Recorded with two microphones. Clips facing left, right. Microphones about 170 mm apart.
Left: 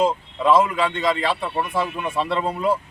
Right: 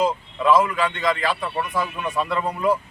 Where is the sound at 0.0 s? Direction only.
25° left (ahead or behind).